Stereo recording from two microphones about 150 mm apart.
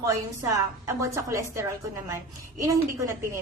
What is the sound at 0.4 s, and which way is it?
A woman's voice, 20° right (ahead or behind).